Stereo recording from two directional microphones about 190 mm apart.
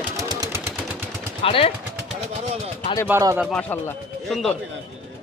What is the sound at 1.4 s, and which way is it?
Speech, 30° left (ahead or behind).